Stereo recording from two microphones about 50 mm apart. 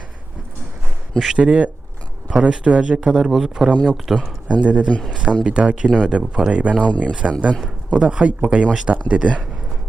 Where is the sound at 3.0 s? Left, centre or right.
Centre.